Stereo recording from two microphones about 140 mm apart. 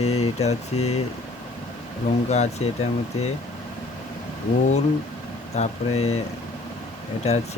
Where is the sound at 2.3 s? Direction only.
50° left (ahead or behind).